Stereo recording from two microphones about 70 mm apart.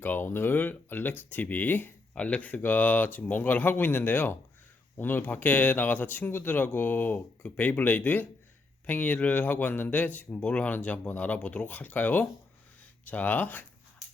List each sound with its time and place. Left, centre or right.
0.0 s speech: left